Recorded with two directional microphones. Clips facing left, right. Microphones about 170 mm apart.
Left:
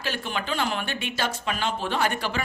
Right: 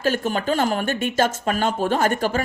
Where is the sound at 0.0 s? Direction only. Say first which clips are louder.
Right 9 dB; 45° right (ahead or behind).